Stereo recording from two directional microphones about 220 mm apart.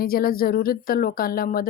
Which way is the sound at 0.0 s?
40° left (ahead or behind).